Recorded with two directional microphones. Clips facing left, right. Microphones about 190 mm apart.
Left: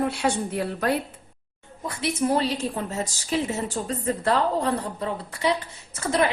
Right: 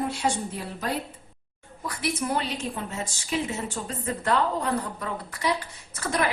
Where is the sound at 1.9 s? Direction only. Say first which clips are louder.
Left 4 dB; 25° left (ahead or behind).